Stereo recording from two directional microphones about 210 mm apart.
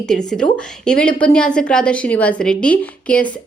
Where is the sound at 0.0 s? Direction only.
5° left (ahead or behind).